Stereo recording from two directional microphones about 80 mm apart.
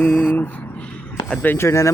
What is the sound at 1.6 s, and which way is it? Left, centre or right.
Speech, left.